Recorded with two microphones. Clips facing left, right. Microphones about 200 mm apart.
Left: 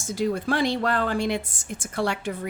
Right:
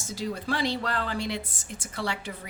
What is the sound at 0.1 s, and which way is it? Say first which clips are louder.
A woman's voice: left 6 dB; 50° left (ahead or behind).